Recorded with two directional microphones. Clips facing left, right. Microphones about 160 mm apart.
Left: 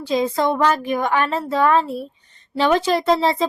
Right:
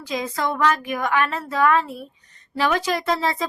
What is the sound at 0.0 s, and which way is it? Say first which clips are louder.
A woman's voice: left 6 dB; 30° left (ahead or behind).